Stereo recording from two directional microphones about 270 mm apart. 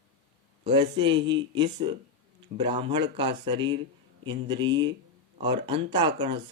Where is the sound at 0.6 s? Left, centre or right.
Centre.